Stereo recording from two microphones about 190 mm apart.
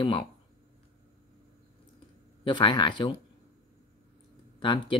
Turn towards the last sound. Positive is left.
turn(degrees=25)  # may be behind; listen again after turning